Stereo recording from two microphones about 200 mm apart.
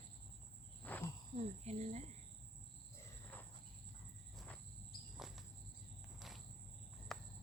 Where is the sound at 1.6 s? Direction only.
35° right (ahead or behind).